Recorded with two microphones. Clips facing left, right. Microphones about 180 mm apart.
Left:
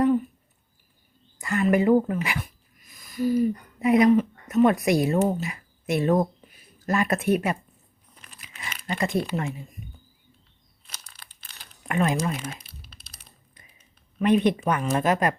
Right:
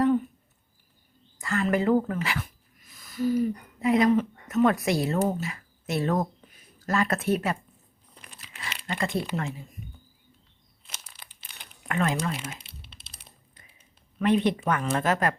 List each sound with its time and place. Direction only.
1.4 s speech: 15° left (ahead or behind)
8.3 s crumpling: 15° left (ahead or behind)
11.1 s crumpling: 20° right (ahead or behind)
11.9 s speech: 20° left (ahead or behind)
12.5 s typing: 25° right (ahead or behind)
14.2 s speech: 15° left (ahead or behind)